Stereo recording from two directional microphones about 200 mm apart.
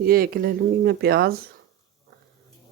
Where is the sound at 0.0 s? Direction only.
45° right (ahead or behind).